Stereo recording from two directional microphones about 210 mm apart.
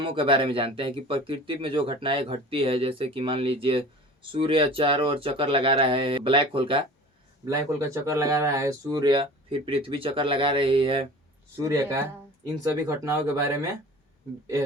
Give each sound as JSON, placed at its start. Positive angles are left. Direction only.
{"t": 0.0, "sound": "speech", "side_deg": -25}
{"t": 7.4, "sound": "speech", "side_deg": -15}
{"t": 13.1, "sound": "speech", "side_deg": -15}